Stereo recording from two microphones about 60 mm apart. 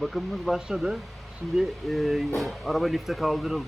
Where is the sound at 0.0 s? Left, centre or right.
Centre.